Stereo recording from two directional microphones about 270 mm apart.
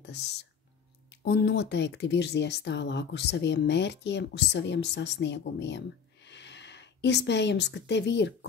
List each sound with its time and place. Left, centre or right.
0.0 s speech: left